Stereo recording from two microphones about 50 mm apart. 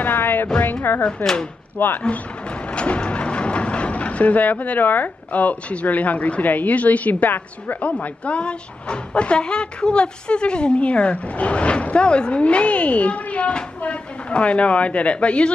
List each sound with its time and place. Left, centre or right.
0.0 s music: left
0.9 s speech: left
2.7 s speech: left
7.8 s speech: left